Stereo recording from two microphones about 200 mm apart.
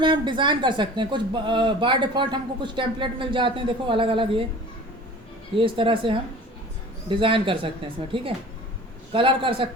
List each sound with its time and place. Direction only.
0.0 s speech: 25° right (ahead or behind)
5.5 s speech: 25° right (ahead or behind)
9.1 s speech: 25° right (ahead or behind)